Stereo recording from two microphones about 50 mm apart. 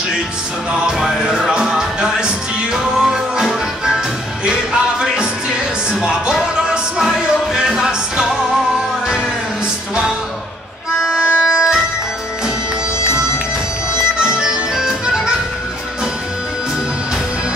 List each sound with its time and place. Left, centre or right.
1.0 s music: centre
11.0 s music: centre
14.1 s music: centre